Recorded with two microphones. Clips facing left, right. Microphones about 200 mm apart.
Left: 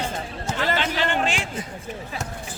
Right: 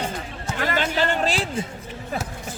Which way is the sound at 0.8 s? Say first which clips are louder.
Right 1 dB; 40° right (ahead or behind).